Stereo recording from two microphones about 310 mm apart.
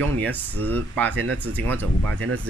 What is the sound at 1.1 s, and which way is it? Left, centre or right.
Speech, right.